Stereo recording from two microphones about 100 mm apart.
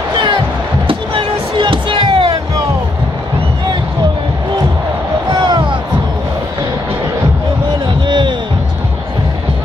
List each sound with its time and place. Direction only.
0.8 s music: 60° right (ahead or behind)
5.5 s music: 55° right (ahead or behind)
8.1 s music: 50° right (ahead or behind)